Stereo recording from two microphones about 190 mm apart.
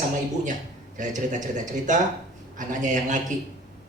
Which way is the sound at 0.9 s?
40° right (ahead or behind).